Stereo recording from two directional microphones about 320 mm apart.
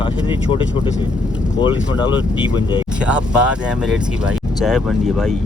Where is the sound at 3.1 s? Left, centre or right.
Centre.